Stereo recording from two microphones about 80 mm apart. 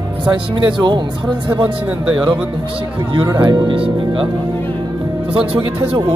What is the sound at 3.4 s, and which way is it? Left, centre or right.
Speech, right.